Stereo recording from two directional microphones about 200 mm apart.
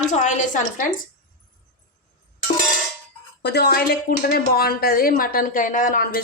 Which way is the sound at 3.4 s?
55° left (ahead or behind).